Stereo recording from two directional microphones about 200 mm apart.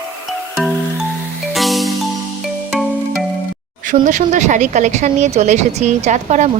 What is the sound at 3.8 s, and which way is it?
Speech, 40° right (ahead or behind).